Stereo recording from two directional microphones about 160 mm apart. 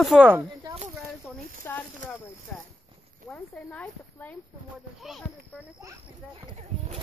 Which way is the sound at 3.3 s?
5° left (ahead or behind).